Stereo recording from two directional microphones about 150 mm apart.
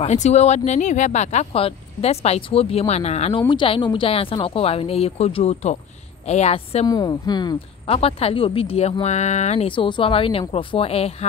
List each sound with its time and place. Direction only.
0.0 s speech: 50° left (ahead or behind)
3.4 s a woman's voice: 35° left (ahead or behind)
6.9 s speech: 25° left (ahead or behind)
7.8 s a woman's voice: 40° left (ahead or behind)
9.7 s a woman's voice: 35° left (ahead or behind)